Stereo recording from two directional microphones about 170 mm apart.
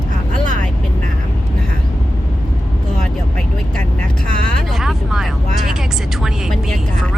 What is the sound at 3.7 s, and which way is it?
Vehicle, 5° left (ahead or behind).